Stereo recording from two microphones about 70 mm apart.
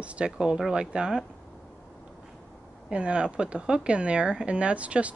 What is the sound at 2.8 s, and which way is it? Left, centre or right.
Speech, centre.